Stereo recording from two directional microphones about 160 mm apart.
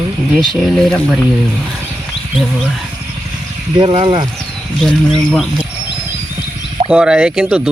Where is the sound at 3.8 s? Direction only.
30° right (ahead or behind).